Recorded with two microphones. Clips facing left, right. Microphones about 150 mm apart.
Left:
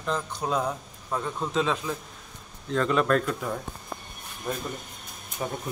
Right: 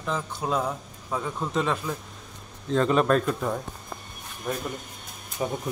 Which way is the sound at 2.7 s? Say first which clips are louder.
Right 2 dB; 20° right (ahead or behind).